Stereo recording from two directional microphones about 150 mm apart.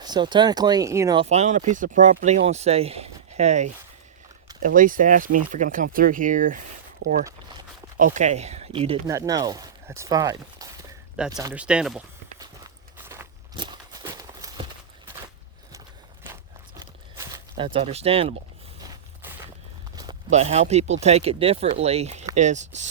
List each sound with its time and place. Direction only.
0.0 s speech: 30° right (ahead or behind)
1.1 s speech: 45° right (ahead or behind)
4.6 s speech: 65° right (ahead or behind)
7.9 s speech: 60° right (ahead or behind); by 9.0 s 40° right (ahead or behind)
9.0 s speech: 20° right (ahead or behind)
11.5 s speech: 5° right (ahead or behind)
12.4 s walk: 20° right (ahead or behind)
13.5 s walk: 30° right (ahead or behind)
17.6 s speech: 40° right (ahead or behind)
19.2 s a sound: 15° right (ahead or behind)
20.3 s speech: 45° right (ahead or behind)